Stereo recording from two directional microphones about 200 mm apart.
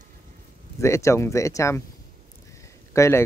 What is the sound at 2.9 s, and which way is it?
Speech, 15° left (ahead or behind).